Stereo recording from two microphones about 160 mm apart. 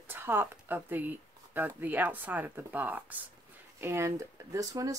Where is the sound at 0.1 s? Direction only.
15° right (ahead or behind).